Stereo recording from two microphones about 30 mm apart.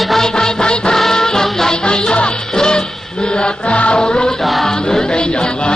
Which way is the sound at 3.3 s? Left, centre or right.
Left.